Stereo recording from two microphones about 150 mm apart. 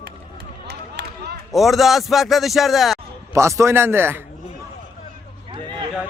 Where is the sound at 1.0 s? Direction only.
90° right.